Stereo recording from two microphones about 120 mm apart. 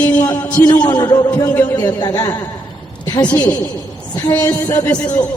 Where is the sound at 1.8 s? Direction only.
35° left (ahead or behind).